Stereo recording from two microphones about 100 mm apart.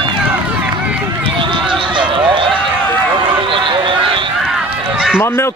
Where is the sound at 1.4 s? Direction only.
55° right (ahead or behind).